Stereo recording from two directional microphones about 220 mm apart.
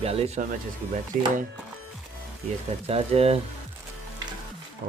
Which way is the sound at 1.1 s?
40° right (ahead or behind).